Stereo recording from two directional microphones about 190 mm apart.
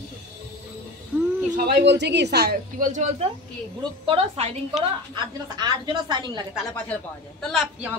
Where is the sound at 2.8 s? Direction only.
40° right (ahead or behind); by 6.4 s 20° right (ahead or behind).